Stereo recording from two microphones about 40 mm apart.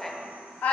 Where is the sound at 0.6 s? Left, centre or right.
Left.